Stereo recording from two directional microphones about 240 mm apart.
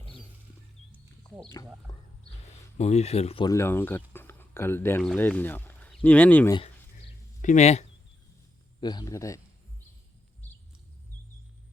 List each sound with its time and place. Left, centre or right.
1.4 s speech: centre
2.7 s speech: left; by 6.6 s centre
7.4 s speech: left
8.8 s speech: centre